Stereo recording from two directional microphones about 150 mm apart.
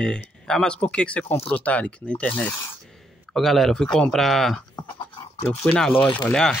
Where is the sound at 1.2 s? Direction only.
40° left (ahead or behind).